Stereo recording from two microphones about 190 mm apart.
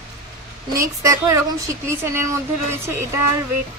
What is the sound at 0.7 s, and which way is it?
Speech, 15° right (ahead or behind).